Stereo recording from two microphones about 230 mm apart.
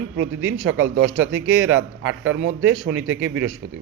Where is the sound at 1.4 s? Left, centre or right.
Right.